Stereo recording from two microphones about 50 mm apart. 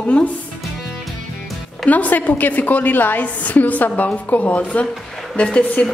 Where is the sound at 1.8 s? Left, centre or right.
Left.